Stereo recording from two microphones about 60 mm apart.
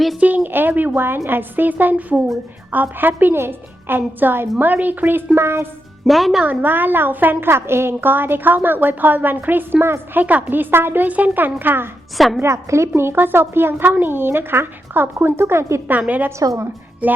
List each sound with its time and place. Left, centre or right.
0.2 s a woman's voice: right
6.1 s speech: centre
6.4 s a woman's voice: right
12.1 s speech: centre
12.4 s a woman's voice: right
13.0 s a woman's voice: right
15.9 s a woman's voice: right